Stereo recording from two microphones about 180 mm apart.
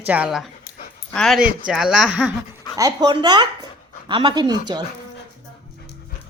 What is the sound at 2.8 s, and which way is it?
Speech, 20° right (ahead or behind).